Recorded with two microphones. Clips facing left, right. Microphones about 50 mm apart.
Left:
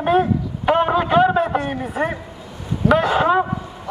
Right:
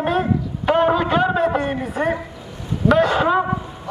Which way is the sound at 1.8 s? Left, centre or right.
Centre.